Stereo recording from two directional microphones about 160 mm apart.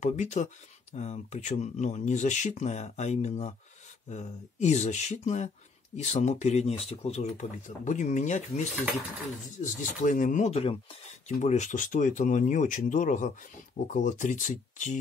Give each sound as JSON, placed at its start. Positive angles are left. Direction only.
{"t": 0.0, "sound": "speech", "side_deg": 45}
{"t": 9.6, "sound": "speech", "side_deg": 55}